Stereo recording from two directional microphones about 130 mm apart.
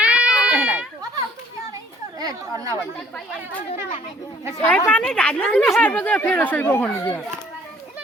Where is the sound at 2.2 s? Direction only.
25° right (ahead or behind).